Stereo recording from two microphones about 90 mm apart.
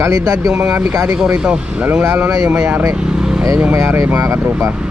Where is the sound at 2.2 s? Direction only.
35° right (ahead or behind).